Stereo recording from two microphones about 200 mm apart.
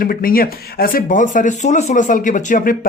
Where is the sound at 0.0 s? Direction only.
45° left (ahead or behind).